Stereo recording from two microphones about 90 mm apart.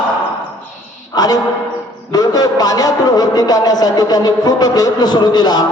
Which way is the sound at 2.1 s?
45° left (ahead or behind).